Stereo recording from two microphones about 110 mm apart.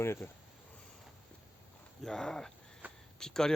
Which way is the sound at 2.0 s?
5° left (ahead or behind).